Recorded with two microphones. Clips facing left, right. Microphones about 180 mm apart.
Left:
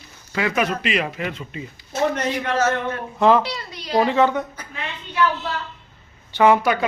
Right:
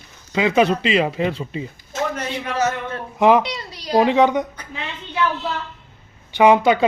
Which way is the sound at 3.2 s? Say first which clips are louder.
Right 2 dB; 15° right (ahead or behind).